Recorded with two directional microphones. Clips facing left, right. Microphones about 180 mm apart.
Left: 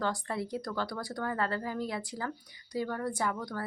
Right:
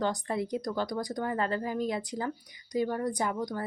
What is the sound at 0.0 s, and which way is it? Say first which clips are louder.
Speech: right 3 dB; 20° right (ahead or behind).